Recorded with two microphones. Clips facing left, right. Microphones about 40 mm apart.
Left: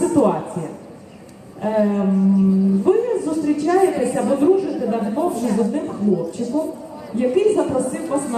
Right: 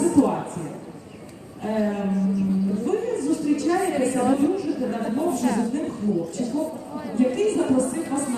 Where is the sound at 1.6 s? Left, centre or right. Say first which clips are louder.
Left 6 dB; centre.